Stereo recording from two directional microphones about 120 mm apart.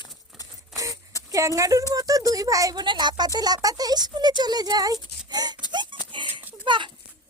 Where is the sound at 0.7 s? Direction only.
30° right (ahead or behind).